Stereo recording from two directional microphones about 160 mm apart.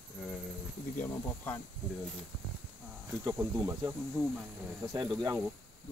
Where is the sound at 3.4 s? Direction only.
20° right (ahead or behind).